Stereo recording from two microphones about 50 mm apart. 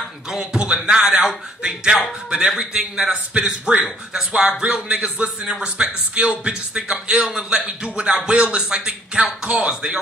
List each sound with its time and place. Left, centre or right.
0.3 s speech: centre